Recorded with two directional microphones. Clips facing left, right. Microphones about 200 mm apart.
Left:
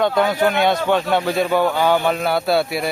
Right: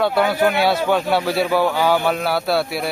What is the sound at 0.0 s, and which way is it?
A man's voice, 5° right (ahead or behind).